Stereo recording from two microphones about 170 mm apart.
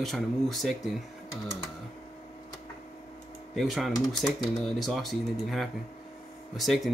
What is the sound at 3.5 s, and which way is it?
Speech, centre (ahead or behind).